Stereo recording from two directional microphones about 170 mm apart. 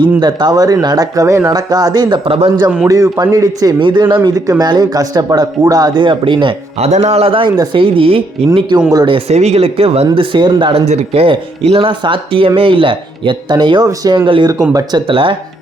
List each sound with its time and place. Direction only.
0.2 s a man's voice: 25° right (ahead or behind)
2.8 s a man's voice: 20° right (ahead or behind); by 10.1 s 35° right (ahead or behind)
10.1 s a man's voice: 25° right (ahead or behind)